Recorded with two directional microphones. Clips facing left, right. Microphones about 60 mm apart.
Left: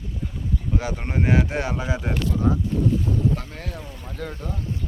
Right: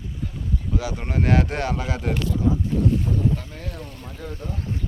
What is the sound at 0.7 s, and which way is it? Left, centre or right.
Speech, left.